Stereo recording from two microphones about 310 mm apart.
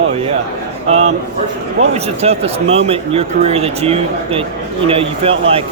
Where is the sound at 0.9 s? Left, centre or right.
Centre.